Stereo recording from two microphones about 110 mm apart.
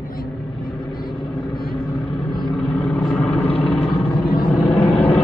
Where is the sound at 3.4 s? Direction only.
60° left (ahead or behind).